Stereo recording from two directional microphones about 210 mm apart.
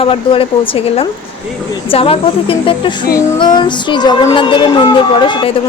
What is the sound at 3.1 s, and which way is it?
Music, 15° left (ahead or behind).